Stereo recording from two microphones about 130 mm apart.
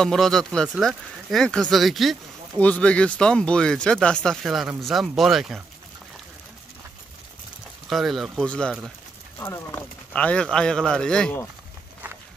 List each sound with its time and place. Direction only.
0.0 s speech: 5° left (ahead or behind)
7.9 s speech: centre (ahead or behind)
9.4 s speech: 20° left (ahead or behind)
9.8 s speech: 10° left (ahead or behind)